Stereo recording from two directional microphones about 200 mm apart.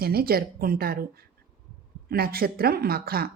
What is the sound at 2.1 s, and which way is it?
Speech, 50° right (ahead or behind).